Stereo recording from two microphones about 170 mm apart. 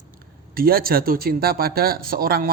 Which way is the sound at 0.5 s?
60° right (ahead or behind).